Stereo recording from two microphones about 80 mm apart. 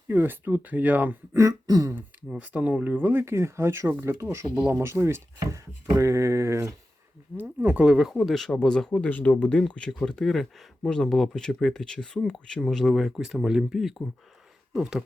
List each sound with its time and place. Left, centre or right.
0.1 s speech: right
1.4 s throat clearing: right
2.3 s speech: centre; by 4.4 s right
4.5 s speech: right
4.8 s speech: right
7.4 s speech: centre
8.1 s speech: centre